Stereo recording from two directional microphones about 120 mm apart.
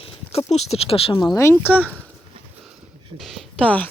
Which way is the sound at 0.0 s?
55° left (ahead or behind).